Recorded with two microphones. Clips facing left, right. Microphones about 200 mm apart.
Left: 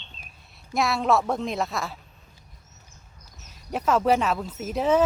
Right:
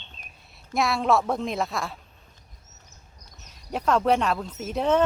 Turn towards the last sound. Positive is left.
turn(degrees=5)  # may be behind; listen again after turning